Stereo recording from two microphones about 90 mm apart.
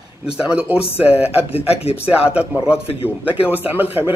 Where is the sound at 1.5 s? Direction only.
90° left.